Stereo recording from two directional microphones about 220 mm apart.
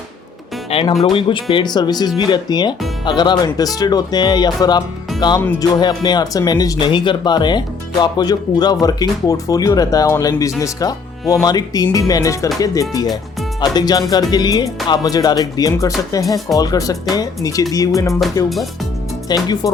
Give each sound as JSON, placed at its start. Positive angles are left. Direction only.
{"t": 0.7, "sound": "speech", "side_deg": 25}
{"t": 19.3, "sound": "speech", "side_deg": 15}